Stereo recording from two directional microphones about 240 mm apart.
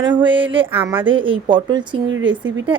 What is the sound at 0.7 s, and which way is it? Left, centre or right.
Speech, centre.